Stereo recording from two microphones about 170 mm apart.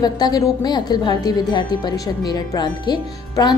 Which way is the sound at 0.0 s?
25° left (ahead or behind).